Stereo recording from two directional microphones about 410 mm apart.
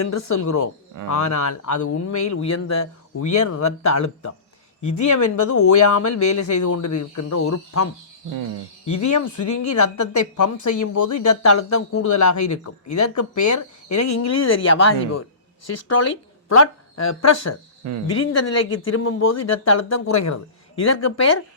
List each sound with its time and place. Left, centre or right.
0.0 s a woman's voice: left
8.9 s a woman's voice: left
16.6 s speech: left